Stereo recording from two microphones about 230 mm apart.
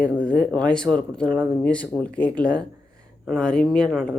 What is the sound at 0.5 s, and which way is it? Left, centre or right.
Speech, centre.